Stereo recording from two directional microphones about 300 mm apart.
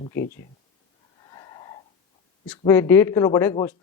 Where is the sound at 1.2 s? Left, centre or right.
Centre.